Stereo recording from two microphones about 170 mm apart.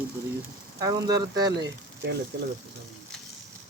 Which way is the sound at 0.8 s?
20° right (ahead or behind).